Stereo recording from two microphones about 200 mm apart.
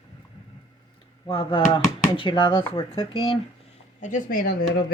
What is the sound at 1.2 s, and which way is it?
Speech, 20° left (ahead or behind).